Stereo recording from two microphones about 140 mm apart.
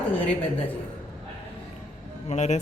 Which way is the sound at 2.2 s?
55° left (ahead or behind).